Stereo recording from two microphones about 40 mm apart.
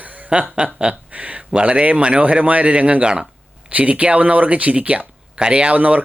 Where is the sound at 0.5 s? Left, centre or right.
Right.